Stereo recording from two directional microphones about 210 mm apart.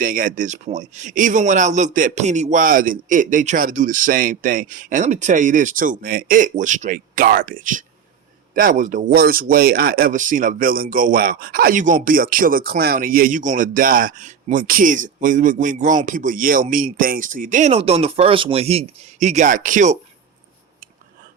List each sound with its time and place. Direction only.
0.0 s speech: 40° right (ahead or behind)